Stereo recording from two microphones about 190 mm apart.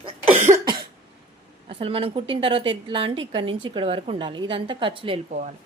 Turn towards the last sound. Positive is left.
turn(degrees=-30)  # may be behind; listen again after turning